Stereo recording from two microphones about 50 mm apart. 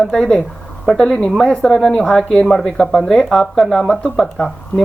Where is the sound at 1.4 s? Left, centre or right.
Centre.